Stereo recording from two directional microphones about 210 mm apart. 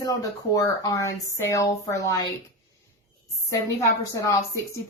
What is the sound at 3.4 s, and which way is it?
Speech, 15° left (ahead or behind).